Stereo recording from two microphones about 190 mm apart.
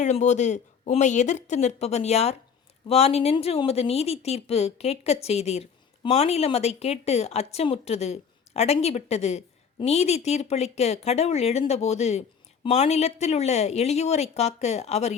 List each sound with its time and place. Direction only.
0.0 s a woman's voice: 40° left (ahead or behind)